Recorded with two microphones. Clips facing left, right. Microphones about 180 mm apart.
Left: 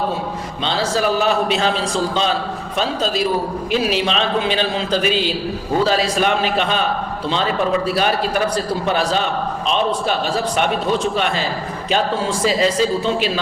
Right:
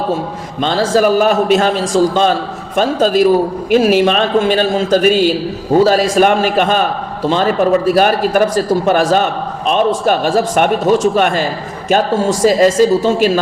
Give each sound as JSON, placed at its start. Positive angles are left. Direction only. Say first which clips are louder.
{"t": 0.6, "sound": "a man's voice", "louder": "right 7 dB", "side_deg": -50}